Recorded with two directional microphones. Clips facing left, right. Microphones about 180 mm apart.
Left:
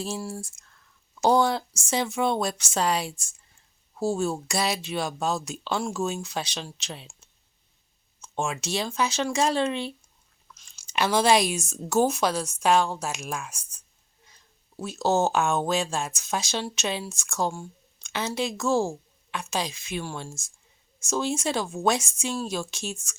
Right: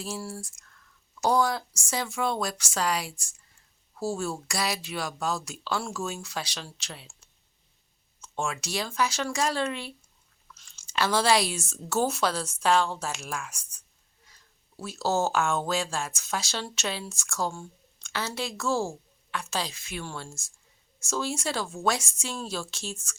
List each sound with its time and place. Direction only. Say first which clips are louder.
0.0 s speech: left 3 dB; 20° left (ahead or behind)